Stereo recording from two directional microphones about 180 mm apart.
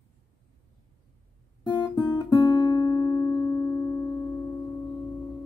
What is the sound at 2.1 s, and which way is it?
Music, 20° left (ahead or behind).